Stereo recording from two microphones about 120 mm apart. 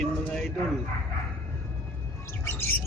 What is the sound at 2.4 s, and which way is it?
Bird, 20° left (ahead or behind).